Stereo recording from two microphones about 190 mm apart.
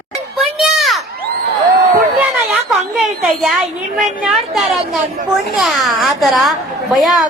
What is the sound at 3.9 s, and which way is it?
A woman's voice, centre (ahead or behind).